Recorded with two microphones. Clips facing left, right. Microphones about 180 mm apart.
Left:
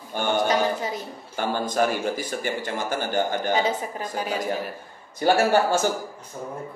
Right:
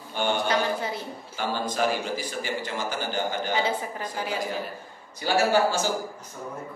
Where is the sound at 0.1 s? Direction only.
50° left (ahead or behind).